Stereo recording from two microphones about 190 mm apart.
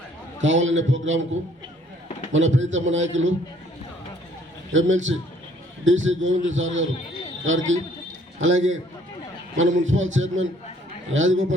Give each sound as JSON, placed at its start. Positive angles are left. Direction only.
{"t": 0.4, "sound": "a man's voice", "side_deg": -80}
{"t": 2.3, "sound": "a man's voice", "side_deg": -80}
{"t": 4.7, "sound": "a man's voice", "side_deg": -90}